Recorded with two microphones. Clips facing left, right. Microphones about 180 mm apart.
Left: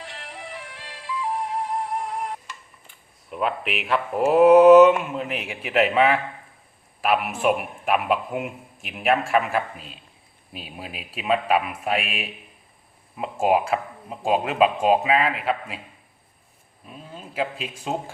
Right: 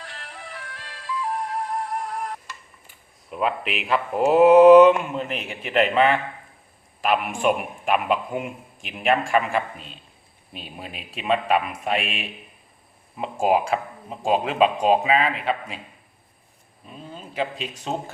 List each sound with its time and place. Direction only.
0.0 s music: 20° left (ahead or behind)
3.2 s a man's voice: centre (ahead or behind)
16.8 s a sound: 5° left (ahead or behind)